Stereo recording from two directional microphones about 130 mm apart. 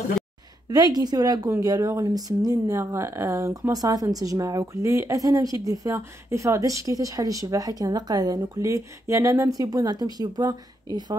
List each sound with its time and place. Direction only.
0.7 s speech: 30° right (ahead or behind)